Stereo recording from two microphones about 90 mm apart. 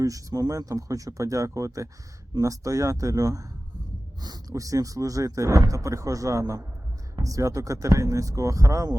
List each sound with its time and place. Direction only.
0.0 s speech: 40° right (ahead or behind)